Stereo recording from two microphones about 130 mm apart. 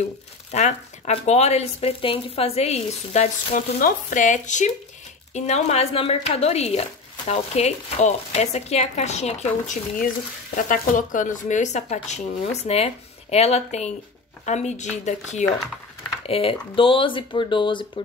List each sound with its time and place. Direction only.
0.5 s speech: 60° left (ahead or behind)
5.3 s speech: 55° left (ahead or behind)
10.5 s speech: 85° left; by 15.4 s 60° left (ahead or behind)
16.3 s speech: 45° left (ahead or behind)